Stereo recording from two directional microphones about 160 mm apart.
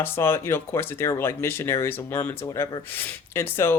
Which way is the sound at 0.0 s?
15° left (ahead or behind).